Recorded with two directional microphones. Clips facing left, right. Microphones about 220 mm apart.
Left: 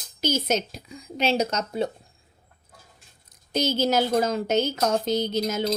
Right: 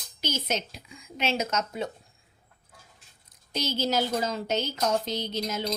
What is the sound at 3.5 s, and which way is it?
A woman's voice, 45° left (ahead or behind).